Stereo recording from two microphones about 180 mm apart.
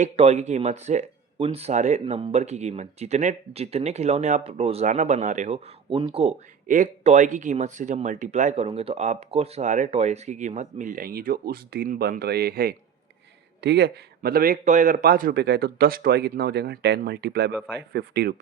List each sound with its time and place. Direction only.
0.0 s speech: 40° right (ahead or behind)
5.9 s speech: 30° right (ahead or behind)
6.7 s speech: 45° right (ahead or behind)
13.6 s speech: 70° right (ahead or behind)